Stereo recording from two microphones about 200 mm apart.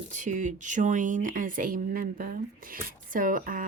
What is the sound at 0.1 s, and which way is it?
Speech, 40° right (ahead or behind).